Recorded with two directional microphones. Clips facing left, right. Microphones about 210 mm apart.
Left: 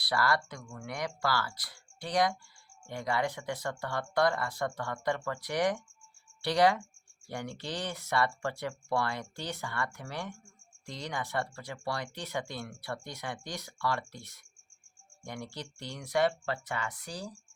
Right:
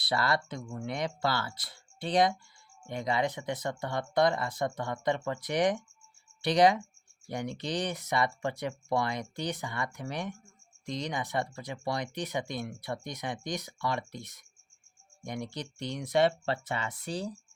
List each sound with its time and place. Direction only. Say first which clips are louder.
0.0 s speech: even; 25° right (ahead or behind)